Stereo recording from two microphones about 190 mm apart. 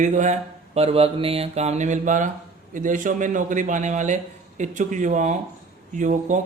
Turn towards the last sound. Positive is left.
turn(degrees=-40)  # may be behind; listen again after turning